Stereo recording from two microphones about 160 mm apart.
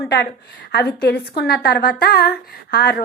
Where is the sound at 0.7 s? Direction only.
90° left.